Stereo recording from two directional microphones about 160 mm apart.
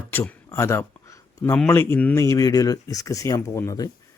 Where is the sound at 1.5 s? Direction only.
15° left (ahead or behind).